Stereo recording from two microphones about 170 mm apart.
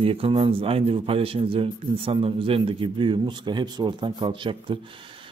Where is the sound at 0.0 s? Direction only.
35° right (ahead or behind).